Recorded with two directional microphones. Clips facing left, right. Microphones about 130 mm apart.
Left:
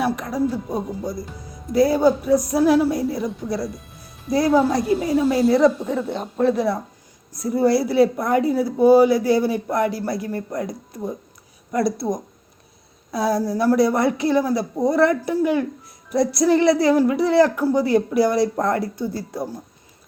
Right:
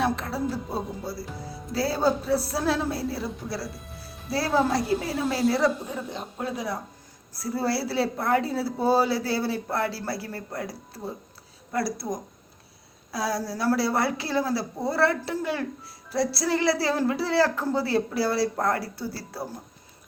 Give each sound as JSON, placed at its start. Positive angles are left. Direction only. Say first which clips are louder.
{"t": 0.0, "sound": "speech", "louder": "left 5 dB", "side_deg": 15}
{"t": 4.3, "sound": "a woman's voice", "louder": "left 6 dB", "side_deg": 15}
{"t": 7.3, "sound": "a woman's voice", "louder": "left 9 dB", "side_deg": 20}